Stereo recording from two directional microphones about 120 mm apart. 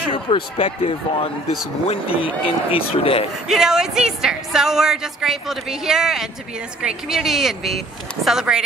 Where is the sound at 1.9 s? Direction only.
50° left (ahead or behind).